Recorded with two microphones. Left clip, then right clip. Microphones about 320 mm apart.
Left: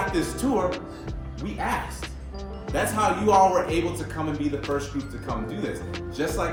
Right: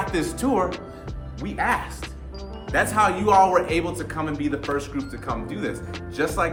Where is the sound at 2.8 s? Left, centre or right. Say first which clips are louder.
Right 2 dB; right.